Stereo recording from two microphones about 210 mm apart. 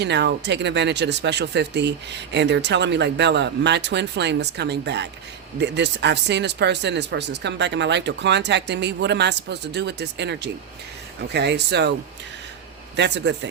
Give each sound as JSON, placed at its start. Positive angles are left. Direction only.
{"t": 0.0, "sound": "speech", "side_deg": -55}
{"t": 13.0, "sound": "speech", "side_deg": -55}